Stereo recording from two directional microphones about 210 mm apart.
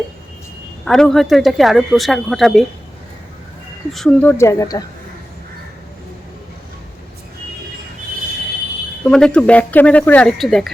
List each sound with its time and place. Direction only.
0.9 s speech: centre (ahead or behind)
3.9 s speech: 5° left (ahead or behind)
9.0 s speech: 5° left (ahead or behind)